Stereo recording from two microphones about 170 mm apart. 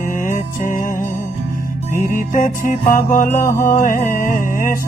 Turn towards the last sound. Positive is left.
turn(degrees=55)  # may be behind; listen again after turning